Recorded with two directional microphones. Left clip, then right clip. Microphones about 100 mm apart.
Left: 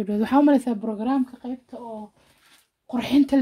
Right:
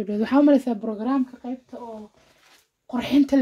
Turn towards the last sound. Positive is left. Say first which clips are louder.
# even
turn(degrees=15)  # may be behind; listen again after turning